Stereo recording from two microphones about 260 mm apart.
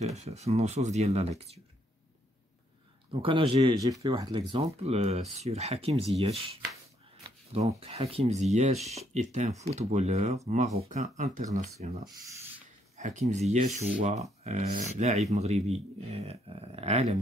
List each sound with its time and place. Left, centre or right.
0.0 s speech: right
3.1 s speech: centre
12.3 s rub: centre
12.9 s speech: right